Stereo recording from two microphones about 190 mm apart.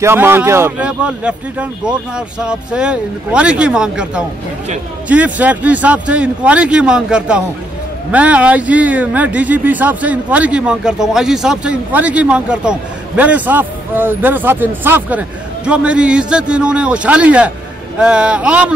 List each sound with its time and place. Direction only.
0.0 s a man's voice: 10° right (ahead or behind)